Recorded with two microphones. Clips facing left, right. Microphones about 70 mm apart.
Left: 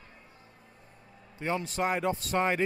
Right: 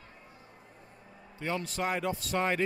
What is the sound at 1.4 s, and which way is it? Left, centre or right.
A man's voice, left.